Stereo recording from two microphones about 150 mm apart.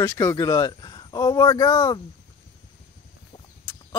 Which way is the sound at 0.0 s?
20° left (ahead or behind).